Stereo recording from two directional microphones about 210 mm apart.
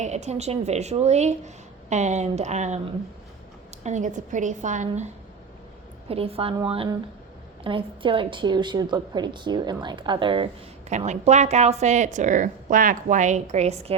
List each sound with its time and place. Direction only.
0.0 s a woman's voice: 35° right (ahead or behind)
6.1 s a woman's voice: 25° right (ahead or behind)